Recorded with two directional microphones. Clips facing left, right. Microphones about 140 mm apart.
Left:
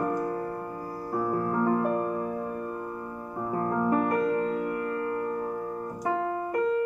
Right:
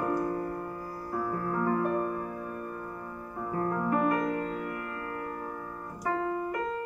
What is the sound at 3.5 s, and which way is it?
Music, 30° left (ahead or behind).